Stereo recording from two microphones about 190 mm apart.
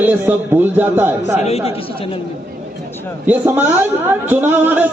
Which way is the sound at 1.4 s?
35° left (ahead or behind).